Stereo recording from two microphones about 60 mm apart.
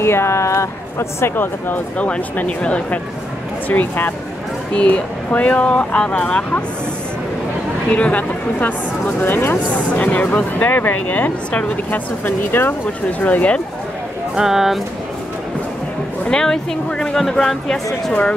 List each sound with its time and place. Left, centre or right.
0.0 s speech: left
2.0 s speech: left
3.6 s speech: left
4.7 s speech: left
7.9 s speech: left
9.9 s speech: left
13.2 s speech: left
14.3 s speech: centre
16.3 s speech: centre